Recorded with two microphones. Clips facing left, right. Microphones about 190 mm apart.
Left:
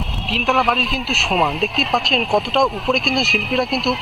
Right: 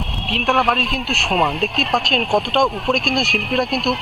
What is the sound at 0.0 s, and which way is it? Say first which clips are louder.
Speech: even; centre (ahead or behind).